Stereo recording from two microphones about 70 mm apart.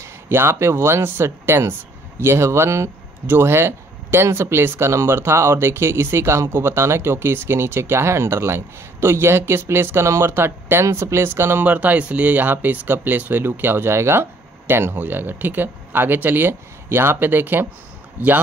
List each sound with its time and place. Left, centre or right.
0.0 s speech: right
11.6 s speech: right